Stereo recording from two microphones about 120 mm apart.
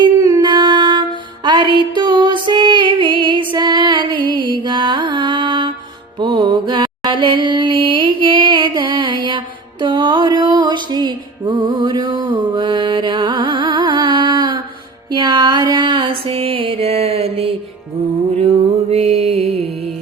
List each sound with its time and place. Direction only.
0.0 s a sound: 30° right (ahead or behind)
1.5 s music: 40° right (ahead or behind)
6.1 s mantra: 40° right (ahead or behind)
9.8 s music: 40° right (ahead or behind)
18.9 s music: 60° right (ahead or behind)